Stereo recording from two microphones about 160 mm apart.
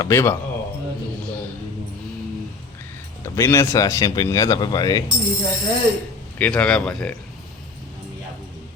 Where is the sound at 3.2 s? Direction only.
15° left (ahead or behind).